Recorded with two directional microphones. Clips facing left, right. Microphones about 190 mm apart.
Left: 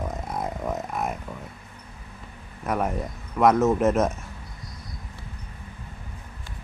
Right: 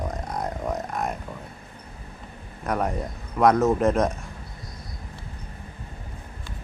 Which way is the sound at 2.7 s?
Centre (ahead or behind).